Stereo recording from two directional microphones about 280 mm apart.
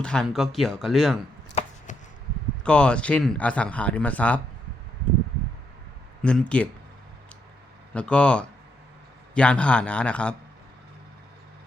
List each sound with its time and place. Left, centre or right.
0.0 s speech: centre
1.9 s a sound: left
2.6 s speech: centre
6.2 s speech: centre
7.9 s speech: centre